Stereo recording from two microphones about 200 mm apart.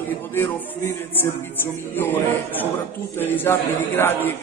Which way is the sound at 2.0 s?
10° left (ahead or behind).